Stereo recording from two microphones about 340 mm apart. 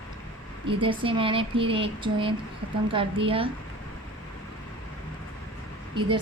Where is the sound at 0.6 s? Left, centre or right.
Centre.